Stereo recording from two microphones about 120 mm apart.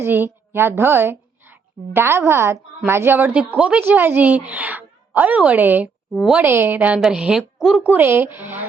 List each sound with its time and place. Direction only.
0.0 s a woman's voice: 20° right (ahead or behind)
6.4 s a woman's voice: 15° right (ahead or behind)